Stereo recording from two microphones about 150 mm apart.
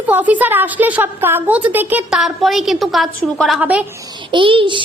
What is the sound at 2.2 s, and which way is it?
A woman's voice, centre (ahead or behind).